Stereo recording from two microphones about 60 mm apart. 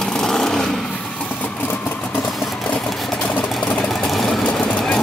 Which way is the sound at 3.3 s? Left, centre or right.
Left.